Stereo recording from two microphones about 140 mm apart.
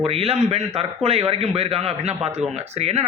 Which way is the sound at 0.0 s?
45° right (ahead or behind).